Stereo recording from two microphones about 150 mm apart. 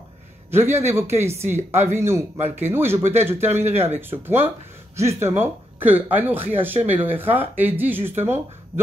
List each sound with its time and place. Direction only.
0.5 s a man's voice: 15° right (ahead or behind)